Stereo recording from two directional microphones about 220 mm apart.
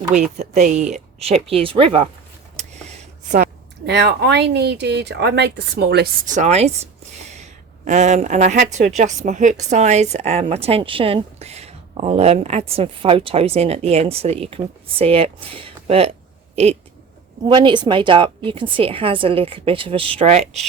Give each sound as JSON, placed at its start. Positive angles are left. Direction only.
{"t": 0.1, "sound": "a woman's voice", "side_deg": -30}
{"t": 3.8, "sound": "a woman's voice", "side_deg": -50}
{"t": 17.4, "sound": "a woman's voice", "side_deg": -20}
{"t": 20.4, "sound": "speech", "side_deg": 0}